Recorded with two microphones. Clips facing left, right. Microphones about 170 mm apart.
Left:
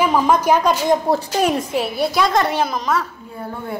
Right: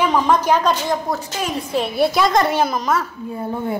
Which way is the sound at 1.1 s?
30° left (ahead or behind).